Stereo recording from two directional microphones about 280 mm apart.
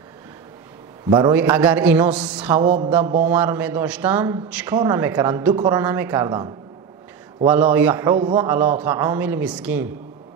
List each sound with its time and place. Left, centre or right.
1.1 s a man's voice: centre
2.6 s a sound: right
3.3 s a man's voice: centre